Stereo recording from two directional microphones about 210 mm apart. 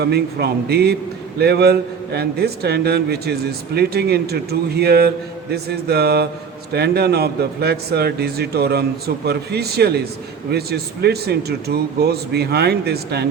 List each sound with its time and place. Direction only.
0.0 s a man's voice: 50° right (ahead or behind)